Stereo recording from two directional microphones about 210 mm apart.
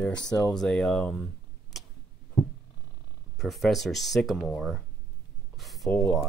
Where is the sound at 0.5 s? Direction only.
5° left (ahead or behind).